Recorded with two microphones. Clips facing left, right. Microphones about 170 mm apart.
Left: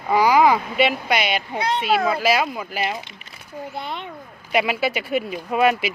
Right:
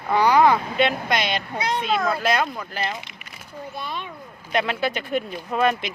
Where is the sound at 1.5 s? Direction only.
60° left (ahead or behind).